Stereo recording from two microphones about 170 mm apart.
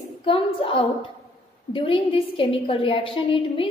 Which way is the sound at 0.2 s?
30° left (ahead or behind).